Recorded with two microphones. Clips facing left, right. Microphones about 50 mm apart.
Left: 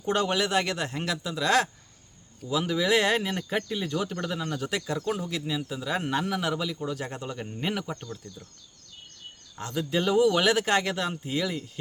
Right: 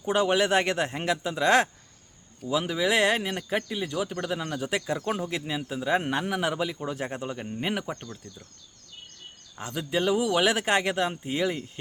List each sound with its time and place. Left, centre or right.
0.0 s speech: centre
0.3 s a man's voice: right
2.5 s a man's voice: centre
7.4 s speech: centre
8.0 s speech: centre
9.6 s speech: centre